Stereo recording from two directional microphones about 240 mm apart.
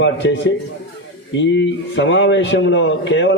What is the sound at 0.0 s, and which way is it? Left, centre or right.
A man's voice, left.